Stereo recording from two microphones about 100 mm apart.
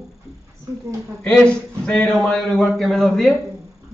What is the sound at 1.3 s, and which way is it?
A man's voice, 5° left (ahead or behind).